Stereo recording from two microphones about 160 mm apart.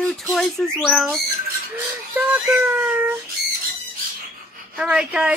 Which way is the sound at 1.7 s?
10° right (ahead or behind).